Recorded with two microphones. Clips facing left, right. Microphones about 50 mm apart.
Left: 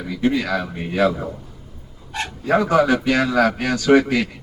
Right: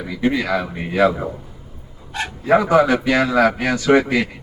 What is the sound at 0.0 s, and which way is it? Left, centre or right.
A man's voice, centre.